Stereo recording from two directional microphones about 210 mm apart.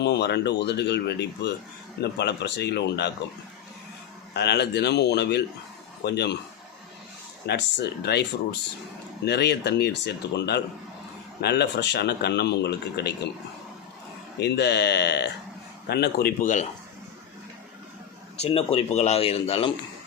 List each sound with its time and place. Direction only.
0.0 s speech: 55° left (ahead or behind)
4.4 s speech: 50° left (ahead or behind)
7.4 s speech: 50° left (ahead or behind)
14.3 s speech: 55° left (ahead or behind)
18.3 s speech: 30° left (ahead or behind)